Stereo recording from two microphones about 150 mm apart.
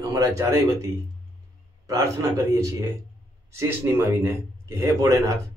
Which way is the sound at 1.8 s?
20° right (ahead or behind).